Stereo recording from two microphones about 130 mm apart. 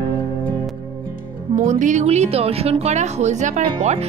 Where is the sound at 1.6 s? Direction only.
70° right (ahead or behind).